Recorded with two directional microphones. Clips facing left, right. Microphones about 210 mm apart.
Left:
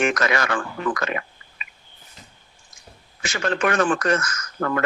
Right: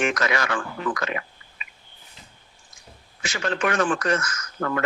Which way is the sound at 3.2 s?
50° left (ahead or behind).